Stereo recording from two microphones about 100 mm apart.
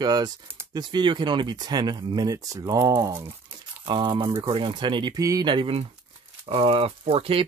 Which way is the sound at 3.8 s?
50° right (ahead or behind).